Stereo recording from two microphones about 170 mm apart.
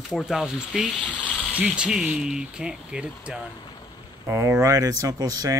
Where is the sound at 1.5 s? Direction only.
5° right (ahead or behind).